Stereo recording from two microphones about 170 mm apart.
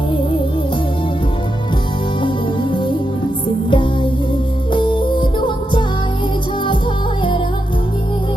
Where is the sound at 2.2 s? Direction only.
30° left (ahead or behind).